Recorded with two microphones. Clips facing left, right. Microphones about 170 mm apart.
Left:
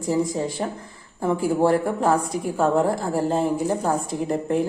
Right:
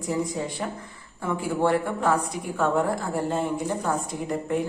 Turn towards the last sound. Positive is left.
turn(degrees=35)  # may be behind; listen again after turning